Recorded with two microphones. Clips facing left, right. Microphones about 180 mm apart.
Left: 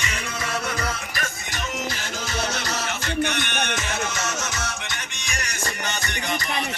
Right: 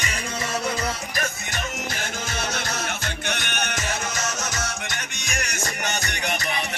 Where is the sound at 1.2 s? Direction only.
50° right (ahead or behind).